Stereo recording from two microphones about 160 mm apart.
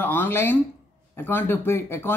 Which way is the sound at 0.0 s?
10° left (ahead or behind).